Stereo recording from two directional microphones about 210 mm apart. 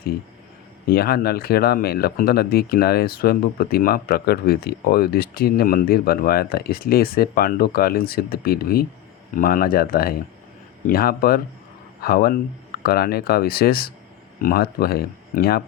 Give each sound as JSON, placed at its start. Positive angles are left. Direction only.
{"t": 0.9, "sound": "speech", "side_deg": 45}